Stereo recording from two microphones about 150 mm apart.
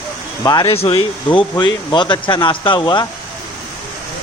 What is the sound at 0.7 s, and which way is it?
Speech, 40° left (ahead or behind).